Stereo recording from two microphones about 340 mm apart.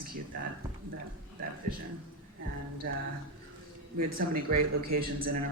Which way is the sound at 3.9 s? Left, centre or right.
Right.